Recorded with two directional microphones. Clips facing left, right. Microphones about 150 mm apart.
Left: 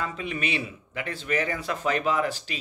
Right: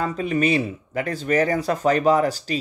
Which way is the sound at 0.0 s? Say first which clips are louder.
Right 9 dB; 40° right (ahead or behind).